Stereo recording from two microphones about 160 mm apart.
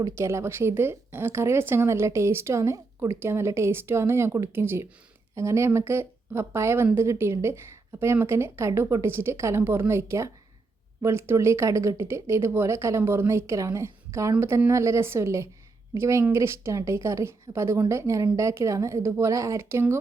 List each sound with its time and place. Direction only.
0.0 s speech: 15° right (ahead or behind)